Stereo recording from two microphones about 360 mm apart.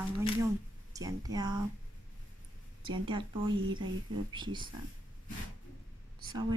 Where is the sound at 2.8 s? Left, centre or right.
Centre.